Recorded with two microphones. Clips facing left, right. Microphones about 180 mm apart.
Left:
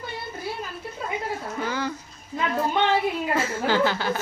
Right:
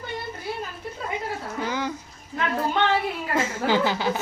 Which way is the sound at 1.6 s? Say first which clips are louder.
Right 1 dB; 15° right (ahead or behind).